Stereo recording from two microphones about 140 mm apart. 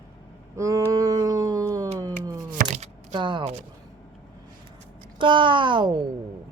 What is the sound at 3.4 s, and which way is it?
Speech, 50° right (ahead or behind).